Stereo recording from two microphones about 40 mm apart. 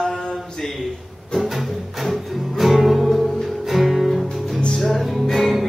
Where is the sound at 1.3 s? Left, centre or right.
Centre.